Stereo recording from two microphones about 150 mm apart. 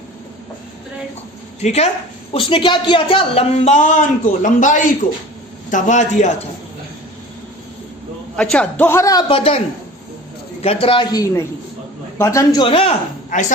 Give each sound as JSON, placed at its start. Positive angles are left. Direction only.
{"t": 1.6, "sound": "a man's voice", "side_deg": 45}
{"t": 8.4, "sound": "a man's voice", "side_deg": 5}
{"t": 9.3, "sound": "speech", "side_deg": 40}
{"t": 10.6, "sound": "a woman's voice", "side_deg": 40}
{"t": 12.6, "sound": "speech", "side_deg": 40}